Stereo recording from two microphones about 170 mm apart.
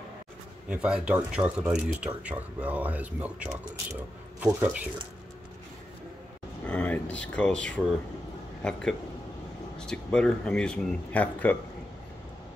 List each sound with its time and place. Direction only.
0.7 s speech: 5° right (ahead or behind)
6.6 s speech: 5° left (ahead or behind)
9.8 s speech: 5° left (ahead or behind)